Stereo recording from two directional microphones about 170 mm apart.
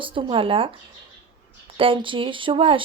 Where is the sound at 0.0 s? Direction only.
30° right (ahead or behind).